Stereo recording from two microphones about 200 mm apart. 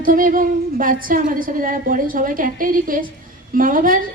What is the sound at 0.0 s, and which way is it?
A woman's voice, 45° right (ahead or behind).